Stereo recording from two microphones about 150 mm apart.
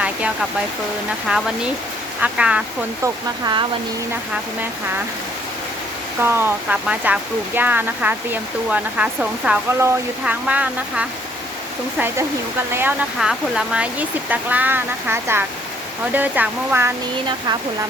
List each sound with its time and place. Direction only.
1.3 s speech: 5° right (ahead or behind)
3.0 s speech: 30° right (ahead or behind)
6.2 s speech: 15° right (ahead or behind)